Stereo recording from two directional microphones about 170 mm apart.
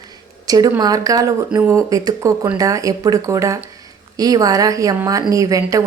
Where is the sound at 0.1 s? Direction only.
20° right (ahead or behind).